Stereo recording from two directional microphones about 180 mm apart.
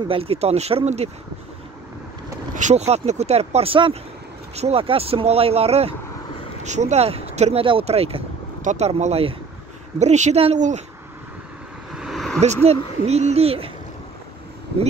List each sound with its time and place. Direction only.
0.1 s speech: 35° right (ahead or behind)
2.5 s speech: 40° right (ahead or behind)
11.9 s a sound: centre (ahead or behind)
12.6 s speech: 35° right (ahead or behind)